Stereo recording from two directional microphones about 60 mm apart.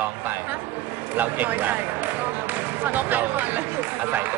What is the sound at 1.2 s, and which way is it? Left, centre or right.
Speech, right.